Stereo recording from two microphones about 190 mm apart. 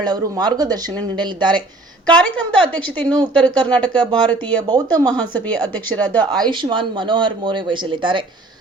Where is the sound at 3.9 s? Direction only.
20° right (ahead or behind).